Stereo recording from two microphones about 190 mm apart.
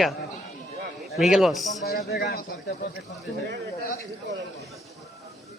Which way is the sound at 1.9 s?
60° left (ahead or behind).